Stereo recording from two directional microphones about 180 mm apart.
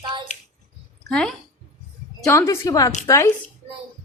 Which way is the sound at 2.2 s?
15° left (ahead or behind).